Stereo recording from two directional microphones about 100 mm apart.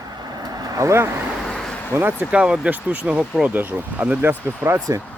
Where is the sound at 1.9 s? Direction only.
20° right (ahead or behind).